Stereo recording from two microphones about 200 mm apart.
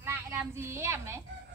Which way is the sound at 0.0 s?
15° right (ahead or behind).